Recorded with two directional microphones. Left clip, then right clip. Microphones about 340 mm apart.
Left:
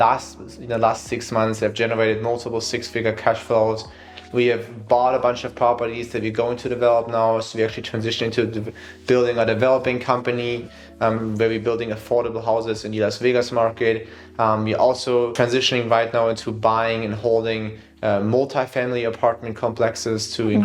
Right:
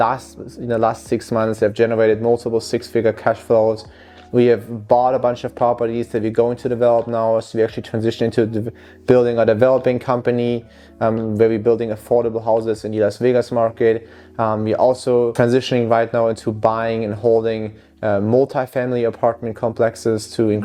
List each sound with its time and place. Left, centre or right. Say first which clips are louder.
0.7 s speech: right 2 dB; right